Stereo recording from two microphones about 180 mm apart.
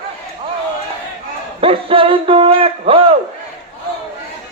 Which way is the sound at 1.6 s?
30° right (ahead or behind).